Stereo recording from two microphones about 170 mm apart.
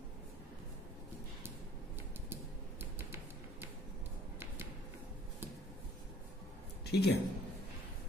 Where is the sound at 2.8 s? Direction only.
15° right (ahead or behind).